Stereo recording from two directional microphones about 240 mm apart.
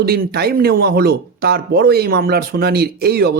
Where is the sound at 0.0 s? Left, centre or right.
Right.